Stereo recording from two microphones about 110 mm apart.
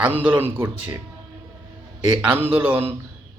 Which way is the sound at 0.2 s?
15° right (ahead or behind).